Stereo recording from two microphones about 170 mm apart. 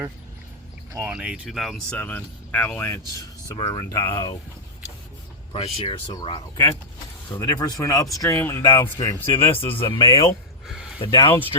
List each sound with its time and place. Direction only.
0.9 s speech: 10° right (ahead or behind); by 4.4 s 25° left (ahead or behind)
5.5 s speech: 30° left (ahead or behind)
11.0 s speech: 30° left (ahead or behind)